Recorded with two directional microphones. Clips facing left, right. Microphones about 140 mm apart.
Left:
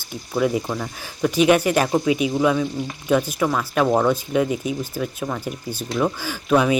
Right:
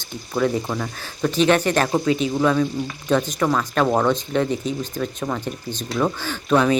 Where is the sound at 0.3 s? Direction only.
10° left (ahead or behind).